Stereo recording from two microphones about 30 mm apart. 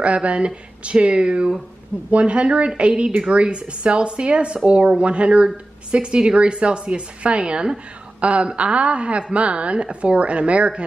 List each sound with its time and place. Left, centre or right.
0.0 s a woman's voice: right
2.0 s a woman's voice: right